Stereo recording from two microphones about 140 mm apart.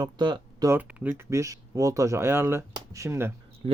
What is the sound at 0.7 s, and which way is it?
Speech, 10° right (ahead or behind).